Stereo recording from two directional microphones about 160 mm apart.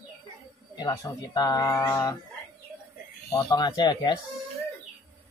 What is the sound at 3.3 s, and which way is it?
Speech, 25° left (ahead or behind).